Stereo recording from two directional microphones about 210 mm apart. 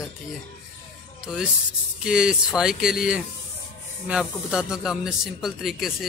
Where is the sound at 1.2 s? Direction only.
5° right (ahead or behind).